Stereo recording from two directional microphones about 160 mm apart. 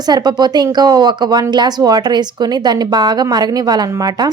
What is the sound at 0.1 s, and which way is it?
Speech, 25° right (ahead or behind).